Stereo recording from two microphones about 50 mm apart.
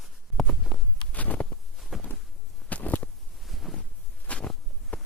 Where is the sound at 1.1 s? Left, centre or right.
Left.